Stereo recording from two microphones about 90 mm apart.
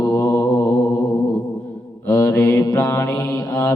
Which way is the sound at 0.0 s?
40° left (ahead or behind).